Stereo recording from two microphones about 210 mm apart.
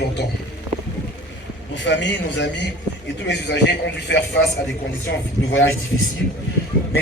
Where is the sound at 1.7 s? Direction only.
60° left (ahead or behind).